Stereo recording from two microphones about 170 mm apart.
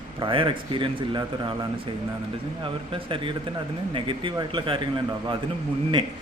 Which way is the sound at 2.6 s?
30° right (ahead or behind).